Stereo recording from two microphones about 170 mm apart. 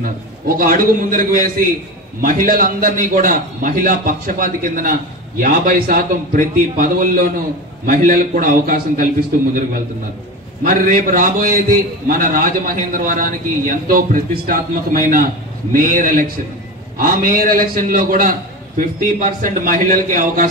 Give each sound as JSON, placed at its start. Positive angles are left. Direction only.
{"t": 0.6, "sound": "a man's voice", "side_deg": -55}
{"t": 10.6, "sound": "a man's voice", "side_deg": -55}